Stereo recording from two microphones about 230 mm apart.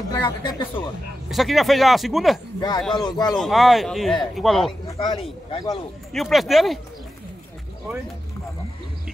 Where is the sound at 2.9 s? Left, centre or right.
Centre.